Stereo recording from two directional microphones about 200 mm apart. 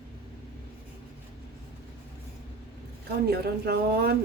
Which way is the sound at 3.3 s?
50° right (ahead or behind).